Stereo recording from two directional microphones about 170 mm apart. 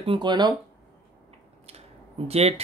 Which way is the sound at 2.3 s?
35° right (ahead or behind).